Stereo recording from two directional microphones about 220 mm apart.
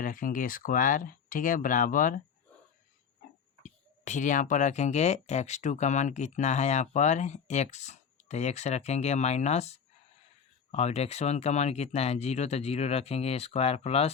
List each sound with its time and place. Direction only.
0.0 s speech: 40° left (ahead or behind)
3.6 s speech: 35° left (ahead or behind)